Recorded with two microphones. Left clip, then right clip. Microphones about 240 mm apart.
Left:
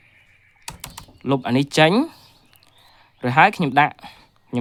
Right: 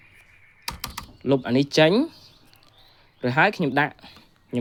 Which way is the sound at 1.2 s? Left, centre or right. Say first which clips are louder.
Left 1 dB; centre.